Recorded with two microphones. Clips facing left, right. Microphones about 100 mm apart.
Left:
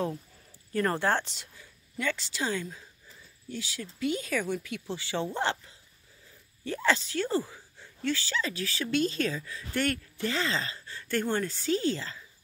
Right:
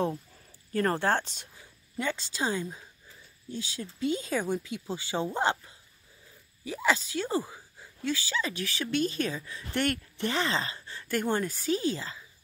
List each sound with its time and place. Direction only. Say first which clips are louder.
0.7 s speech: right 1 dB; 40° right (ahead or behind)
1.4 s speech: even; 20° right (ahead or behind)
6.6 s speech: even; 10° right (ahead or behind)